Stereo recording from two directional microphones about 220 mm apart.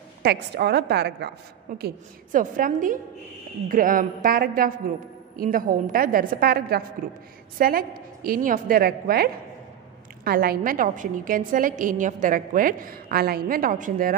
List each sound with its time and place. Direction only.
0.2 s a woman's voice: 45° right (ahead or behind)